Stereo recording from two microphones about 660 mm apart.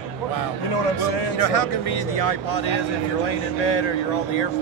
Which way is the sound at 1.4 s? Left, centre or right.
Left.